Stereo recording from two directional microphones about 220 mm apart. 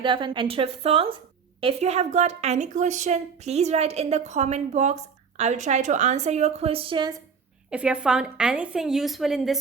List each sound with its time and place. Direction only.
0.0 s a woman's voice: 20° right (ahead or behind)
7.7 s a woman's voice: 5° right (ahead or behind)